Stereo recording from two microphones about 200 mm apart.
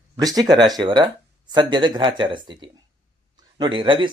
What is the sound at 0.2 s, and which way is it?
Speech, 20° right (ahead or behind).